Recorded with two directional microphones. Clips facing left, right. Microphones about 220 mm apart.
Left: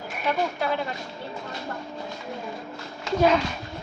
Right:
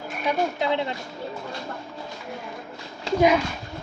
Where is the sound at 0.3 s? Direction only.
20° right (ahead or behind).